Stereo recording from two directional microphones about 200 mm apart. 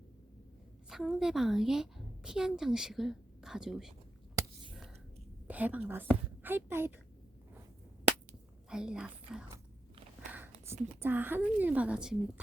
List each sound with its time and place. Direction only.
0.9 s a woman's voice: centre (ahead or behind)
4.4 s a sound: 15° right (ahead or behind)
5.5 s speech: 10° right (ahead or behind)
8.7 s a woman's voice: 5° right (ahead or behind)
10.3 s a sound: 10° right (ahead or behind)
11.0 s speech: 10° right (ahead or behind)